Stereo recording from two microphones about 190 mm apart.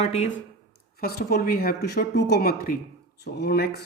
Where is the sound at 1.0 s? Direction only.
55° left (ahead or behind).